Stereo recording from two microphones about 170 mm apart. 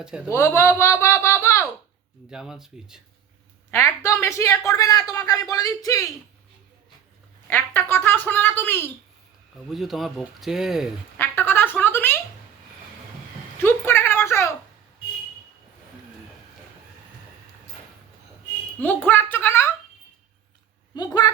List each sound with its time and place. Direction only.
0.3 s a man's voice: 15° left (ahead or behind)
2.3 s speech: 5° right (ahead or behind)
3.7 s speech: 15° left (ahead or behind)
7.4 s speech: 10° left (ahead or behind)
9.6 s speech: centre (ahead or behind)
11.2 s a sound: 10° left (ahead or behind)
13.6 s a sound: 15° left (ahead or behind)
18.8 s speech: 10° left (ahead or behind)
20.9 s a woman's voice: 25° left (ahead or behind)